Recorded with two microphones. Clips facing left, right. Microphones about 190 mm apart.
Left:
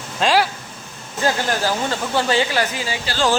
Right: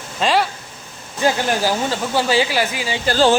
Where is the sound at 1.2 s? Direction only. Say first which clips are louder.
Right 2 dB; 15° right (ahead or behind).